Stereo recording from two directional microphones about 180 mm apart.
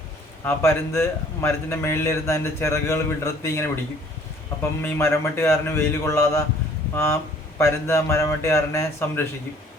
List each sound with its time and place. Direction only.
0.4 s a man's voice: 15° left (ahead or behind)
4.8 s a man's voice: 15° left (ahead or behind)